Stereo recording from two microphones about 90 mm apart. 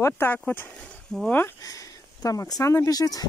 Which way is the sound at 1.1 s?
5° left (ahead or behind).